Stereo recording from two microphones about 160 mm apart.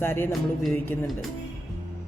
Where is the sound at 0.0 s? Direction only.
15° left (ahead or behind).